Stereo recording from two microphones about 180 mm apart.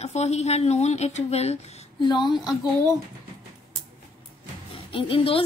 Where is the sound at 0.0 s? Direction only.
35° left (ahead or behind).